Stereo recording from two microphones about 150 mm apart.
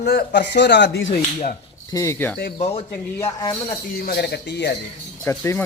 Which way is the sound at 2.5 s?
45° left (ahead or behind).